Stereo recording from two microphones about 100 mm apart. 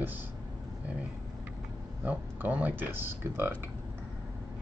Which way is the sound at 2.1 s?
15° right (ahead or behind).